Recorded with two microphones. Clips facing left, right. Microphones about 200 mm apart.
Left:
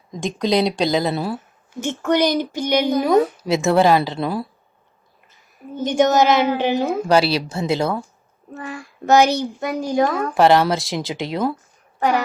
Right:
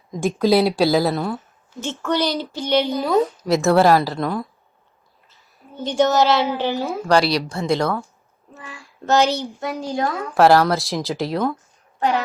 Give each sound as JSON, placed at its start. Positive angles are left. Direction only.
{"t": 0.1, "sound": "speech", "side_deg": -5}
{"t": 1.8, "sound": "child singing", "side_deg": 15}
{"t": 3.4, "sound": "speech", "side_deg": 0}
{"t": 5.8, "sound": "child singing", "side_deg": 20}
{"t": 7.3, "sound": "speech", "side_deg": 5}
{"t": 9.0, "sound": "child singing", "side_deg": 15}
{"t": 10.3, "sound": "speech", "side_deg": 0}